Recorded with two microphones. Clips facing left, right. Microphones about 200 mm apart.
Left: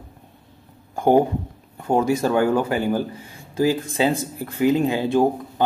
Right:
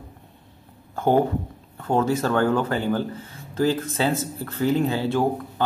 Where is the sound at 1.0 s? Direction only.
15° left (ahead or behind).